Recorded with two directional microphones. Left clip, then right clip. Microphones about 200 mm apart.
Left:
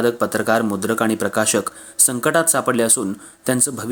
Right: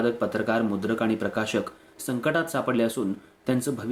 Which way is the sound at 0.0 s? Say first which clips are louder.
Left 7 dB; 45° left (ahead or behind).